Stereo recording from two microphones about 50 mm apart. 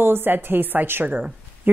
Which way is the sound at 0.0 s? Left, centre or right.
Right.